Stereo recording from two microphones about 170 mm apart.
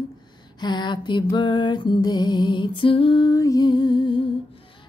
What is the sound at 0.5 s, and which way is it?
A woman's voice, 25° left (ahead or behind).